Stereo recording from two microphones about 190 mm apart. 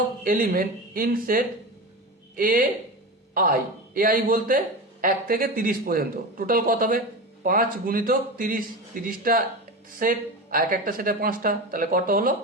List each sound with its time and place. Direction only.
0.3 s speech: 45° right (ahead or behind)
3.9 s speech: 50° right (ahead or behind)